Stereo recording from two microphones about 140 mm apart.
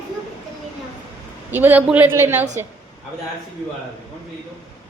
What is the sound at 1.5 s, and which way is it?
Speech, 15° right (ahead or behind).